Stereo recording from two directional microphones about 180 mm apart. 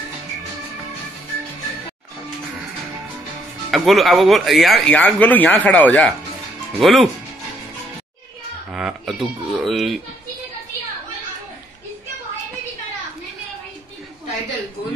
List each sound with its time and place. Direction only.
3.7 s speech: centre (ahead or behind)
8.7 s speech: centre (ahead or behind)